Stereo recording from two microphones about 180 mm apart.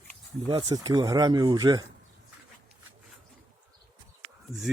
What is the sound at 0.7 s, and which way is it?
Speech, 20° right (ahead or behind).